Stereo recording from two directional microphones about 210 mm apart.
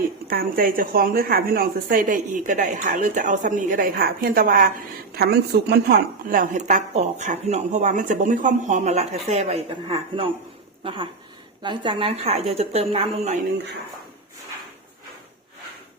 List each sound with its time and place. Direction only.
0.3 s a woman's voice: 45° right (ahead or behind)